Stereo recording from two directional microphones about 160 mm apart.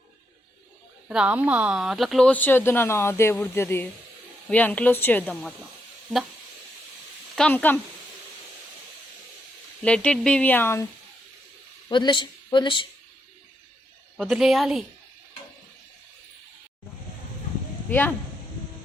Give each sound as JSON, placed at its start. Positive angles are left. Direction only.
{"t": 1.0, "sound": "speech", "side_deg": -5}
{"t": 7.3, "sound": "speech", "side_deg": 10}
{"t": 9.8, "sound": "speech", "side_deg": 5}
{"t": 11.9, "sound": "speech", "side_deg": 30}
{"t": 14.2, "sound": "a woman's voice", "side_deg": 0}